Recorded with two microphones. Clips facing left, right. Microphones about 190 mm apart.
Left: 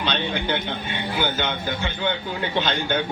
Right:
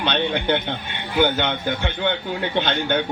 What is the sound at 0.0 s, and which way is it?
A man's voice, 60° right (ahead or behind).